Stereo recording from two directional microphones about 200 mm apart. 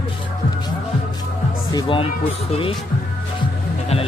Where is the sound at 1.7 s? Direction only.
25° left (ahead or behind).